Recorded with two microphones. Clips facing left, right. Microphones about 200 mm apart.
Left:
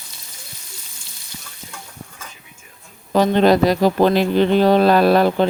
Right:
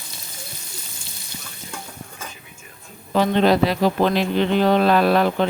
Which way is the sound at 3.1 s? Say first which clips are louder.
Left 3 dB; 45° left (ahead or behind).